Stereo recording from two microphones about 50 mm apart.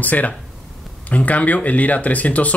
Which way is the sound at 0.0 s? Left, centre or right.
Left.